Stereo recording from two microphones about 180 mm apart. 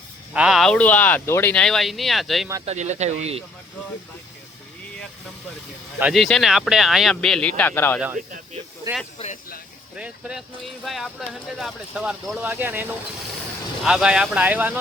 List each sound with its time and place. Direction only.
0.3 s speech: 5° right (ahead or behind)
2.6 s speech: 40° right (ahead or behind)
6.0 s speech: 5° right (ahead or behind)
9.1 s speech: 40° left (ahead or behind)
10.0 s speech: 5° right (ahead or behind)